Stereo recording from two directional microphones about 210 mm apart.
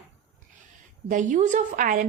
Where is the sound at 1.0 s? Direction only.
35° right (ahead or behind).